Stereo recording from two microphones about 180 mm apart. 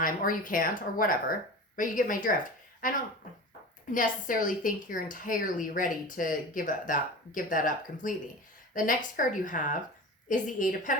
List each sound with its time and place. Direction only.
0.0 s speech: 50° left (ahead or behind)
3.9 s a woman's voice: 45° left (ahead or behind)